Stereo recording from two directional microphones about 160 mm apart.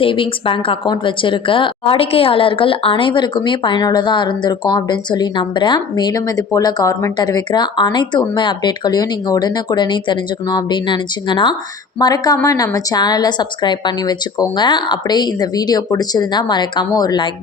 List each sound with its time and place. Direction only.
0.0 s a woman's voice: 35° left (ahead or behind)